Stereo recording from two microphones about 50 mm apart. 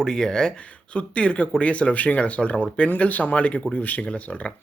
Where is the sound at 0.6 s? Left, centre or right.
Left.